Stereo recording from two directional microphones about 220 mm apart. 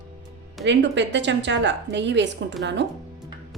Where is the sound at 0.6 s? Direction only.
55° right (ahead or behind).